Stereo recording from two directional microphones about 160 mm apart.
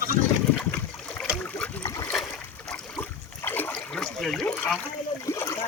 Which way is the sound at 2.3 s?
15° left (ahead or behind).